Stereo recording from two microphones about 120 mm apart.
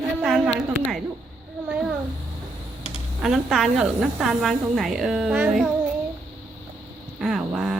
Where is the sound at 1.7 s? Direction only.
5° right (ahead or behind).